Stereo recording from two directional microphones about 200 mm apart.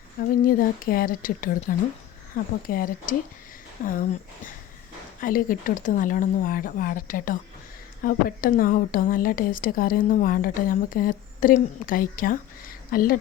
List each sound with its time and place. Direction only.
0.4 s a woman's voice: 45° left (ahead or behind)